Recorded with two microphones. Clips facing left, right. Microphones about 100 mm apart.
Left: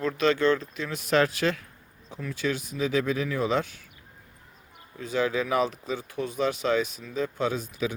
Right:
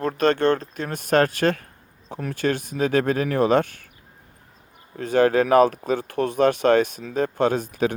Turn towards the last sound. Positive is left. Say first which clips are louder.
# right 7 dB
turn(degrees=-55)  # may be behind; listen again after turning